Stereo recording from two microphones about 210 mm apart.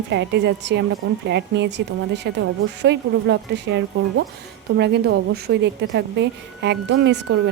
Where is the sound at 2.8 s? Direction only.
55° right (ahead or behind).